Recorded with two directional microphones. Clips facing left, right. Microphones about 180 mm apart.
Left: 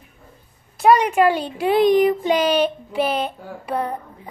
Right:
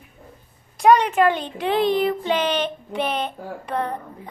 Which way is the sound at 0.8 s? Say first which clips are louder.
Left 1 dB; 5° left (ahead or behind).